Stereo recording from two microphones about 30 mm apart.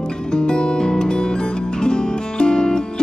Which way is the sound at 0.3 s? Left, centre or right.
Left.